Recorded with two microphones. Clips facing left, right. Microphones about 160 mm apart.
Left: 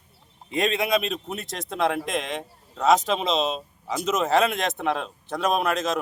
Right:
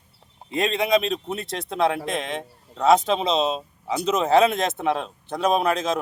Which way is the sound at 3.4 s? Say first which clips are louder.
Right 2 dB; 35° right (ahead or behind).